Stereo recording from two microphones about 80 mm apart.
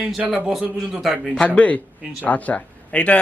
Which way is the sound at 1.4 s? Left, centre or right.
Centre.